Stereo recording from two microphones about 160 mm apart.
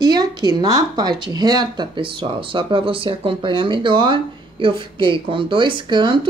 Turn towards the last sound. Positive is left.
turn(degrees=-30)  # may be behind; listen again after turning